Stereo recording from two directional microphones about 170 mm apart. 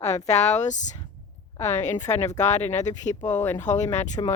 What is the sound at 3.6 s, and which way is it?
Speech, 45° left (ahead or behind).